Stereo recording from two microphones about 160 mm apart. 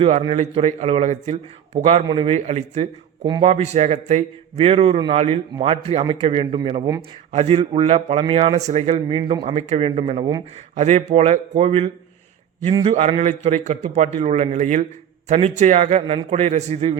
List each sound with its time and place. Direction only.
0.0 s a man's voice: 35° right (ahead or behind)
7.3 s speech: 35° right (ahead or behind)
10.8 s a man's voice: 45° right (ahead or behind)
12.9 s a man's voice: 45° right (ahead or behind)